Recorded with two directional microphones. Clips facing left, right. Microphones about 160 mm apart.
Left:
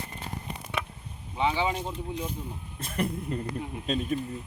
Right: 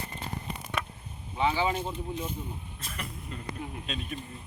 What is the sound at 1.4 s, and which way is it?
Speech, 15° left (ahead or behind).